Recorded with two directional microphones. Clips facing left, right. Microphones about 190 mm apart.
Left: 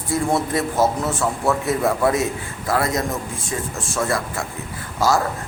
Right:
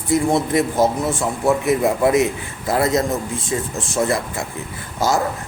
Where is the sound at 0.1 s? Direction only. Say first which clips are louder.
Right 3 dB; 15° right (ahead or behind).